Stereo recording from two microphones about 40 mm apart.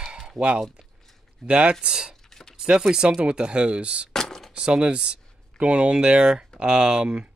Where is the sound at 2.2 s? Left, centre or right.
Centre.